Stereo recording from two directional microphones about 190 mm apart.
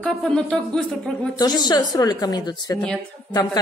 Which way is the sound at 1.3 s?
20° left (ahead or behind).